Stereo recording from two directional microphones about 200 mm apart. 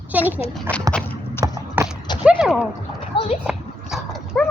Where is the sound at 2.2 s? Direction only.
5° right (ahead or behind).